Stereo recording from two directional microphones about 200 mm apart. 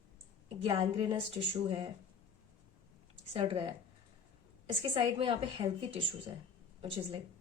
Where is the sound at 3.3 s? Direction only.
25° right (ahead or behind).